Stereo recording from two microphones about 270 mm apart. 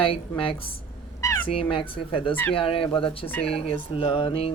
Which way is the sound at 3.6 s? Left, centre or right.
Left.